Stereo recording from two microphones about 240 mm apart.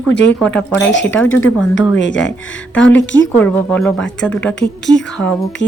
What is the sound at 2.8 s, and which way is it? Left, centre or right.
Speech, centre.